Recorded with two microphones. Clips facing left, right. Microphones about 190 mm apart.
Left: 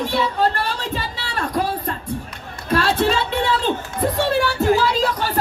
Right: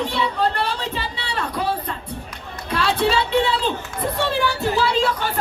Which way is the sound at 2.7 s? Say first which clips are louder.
Left 2 dB; 50° left (ahead or behind).